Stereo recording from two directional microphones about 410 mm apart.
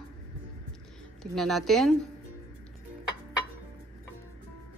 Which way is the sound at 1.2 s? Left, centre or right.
Centre.